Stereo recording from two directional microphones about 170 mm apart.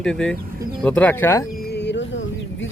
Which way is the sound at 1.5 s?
70° left (ahead or behind).